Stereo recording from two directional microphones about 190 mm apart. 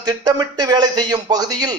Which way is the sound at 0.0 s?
20° right (ahead or behind).